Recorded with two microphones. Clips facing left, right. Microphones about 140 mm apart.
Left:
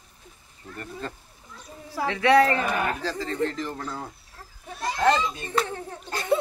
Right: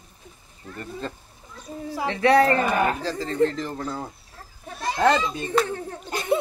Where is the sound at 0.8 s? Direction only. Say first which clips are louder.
Right 2 dB; 25° right (ahead or behind).